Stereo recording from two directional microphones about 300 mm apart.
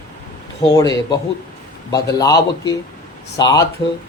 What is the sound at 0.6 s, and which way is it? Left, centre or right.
A man's voice, centre.